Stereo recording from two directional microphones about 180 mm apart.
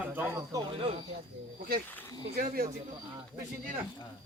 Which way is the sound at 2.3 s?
55° right (ahead or behind).